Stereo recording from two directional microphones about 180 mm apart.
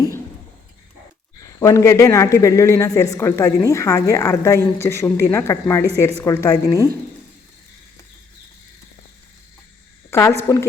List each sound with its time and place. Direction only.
1.5 s speech: 20° left (ahead or behind)
10.1 s a woman's voice: 15° left (ahead or behind)